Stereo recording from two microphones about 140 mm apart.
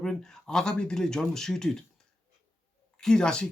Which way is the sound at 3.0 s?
5° left (ahead or behind).